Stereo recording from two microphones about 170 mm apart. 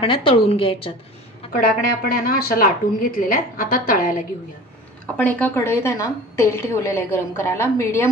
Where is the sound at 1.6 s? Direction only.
55° left (ahead or behind).